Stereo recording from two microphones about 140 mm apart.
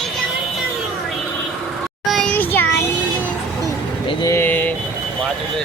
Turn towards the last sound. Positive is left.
turn(degrees=15)  # may be behind; listen again after turning